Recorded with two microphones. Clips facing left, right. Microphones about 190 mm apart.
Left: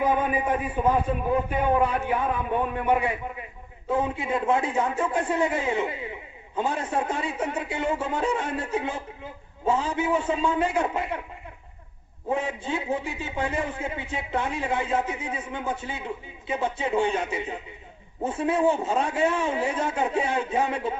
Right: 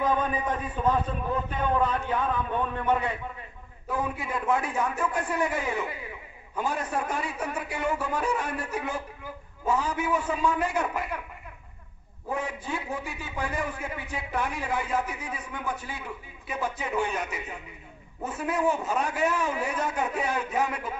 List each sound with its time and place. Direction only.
0.1 s a man's voice: 10° left (ahead or behind)
3.8 s a man's voice: 25° left (ahead or behind)
12.3 s a man's voice: 25° left (ahead or behind)